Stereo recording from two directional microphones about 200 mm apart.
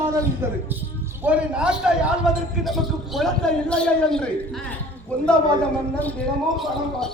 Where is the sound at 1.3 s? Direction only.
5° right (ahead or behind).